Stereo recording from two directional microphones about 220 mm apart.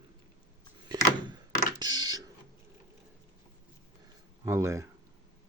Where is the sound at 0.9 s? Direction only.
20° right (ahead or behind).